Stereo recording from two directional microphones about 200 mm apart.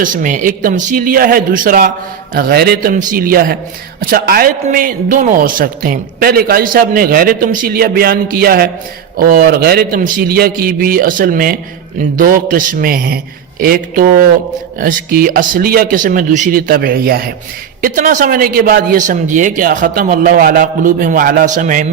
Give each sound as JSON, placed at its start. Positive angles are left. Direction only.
{"t": 0.0, "sound": "speech", "side_deg": -40}